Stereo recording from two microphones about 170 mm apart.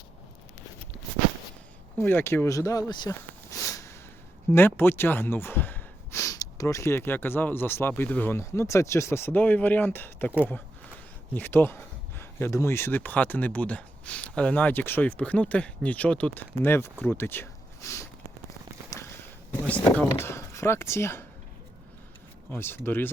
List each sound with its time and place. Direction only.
2.0 s speech: 15° left (ahead or behind)
11.3 s speech: 10° left (ahead or behind)
19.6 s speech: 10° left (ahead or behind)
22.5 s speech: 15° left (ahead or behind)